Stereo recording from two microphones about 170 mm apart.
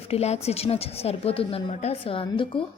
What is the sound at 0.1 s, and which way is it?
A woman's voice, 40° left (ahead or behind).